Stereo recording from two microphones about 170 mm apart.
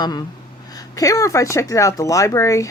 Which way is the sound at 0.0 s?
25° left (ahead or behind).